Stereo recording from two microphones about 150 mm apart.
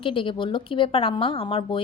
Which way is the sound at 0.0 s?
35° left (ahead or behind).